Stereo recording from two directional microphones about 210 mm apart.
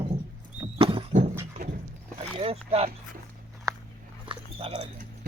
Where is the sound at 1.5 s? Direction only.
35° right (ahead or behind).